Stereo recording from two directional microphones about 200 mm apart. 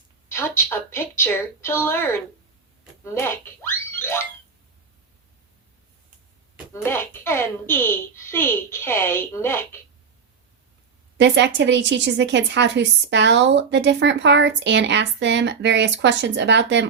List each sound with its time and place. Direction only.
0.3 s a woman's voice: 10° left (ahead or behind)
6.8 s a woman's voice: 10° left (ahead or behind)
11.2 s a woman's voice: 60° right (ahead or behind)